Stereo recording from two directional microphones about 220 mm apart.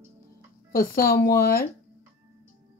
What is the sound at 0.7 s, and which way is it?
Speech, 40° left (ahead or behind).